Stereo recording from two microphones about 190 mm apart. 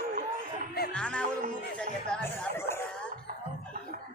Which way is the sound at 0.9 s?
5° left (ahead or behind).